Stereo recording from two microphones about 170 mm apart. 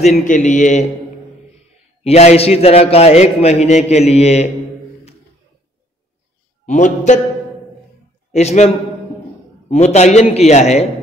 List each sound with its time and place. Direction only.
0.0 s a man's voice: 45° left (ahead or behind)
2.0 s a man's voice: 40° left (ahead or behind)
6.6 s a man's voice: 45° left (ahead or behind)
8.3 s a man's voice: 40° left (ahead or behind)